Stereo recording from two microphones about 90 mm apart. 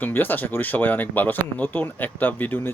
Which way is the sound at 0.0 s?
20° left (ahead or behind).